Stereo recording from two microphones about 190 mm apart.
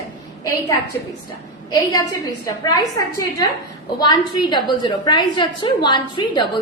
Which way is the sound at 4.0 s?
20° left (ahead or behind).